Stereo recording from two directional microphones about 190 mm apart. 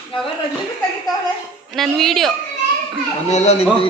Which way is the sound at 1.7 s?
Centre (ahead or behind).